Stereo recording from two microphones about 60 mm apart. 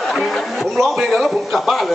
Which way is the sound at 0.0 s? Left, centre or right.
Centre.